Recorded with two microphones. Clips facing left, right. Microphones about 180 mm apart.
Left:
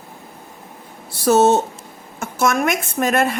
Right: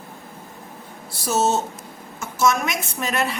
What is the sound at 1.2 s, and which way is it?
A woman's voice, 60° left (ahead or behind).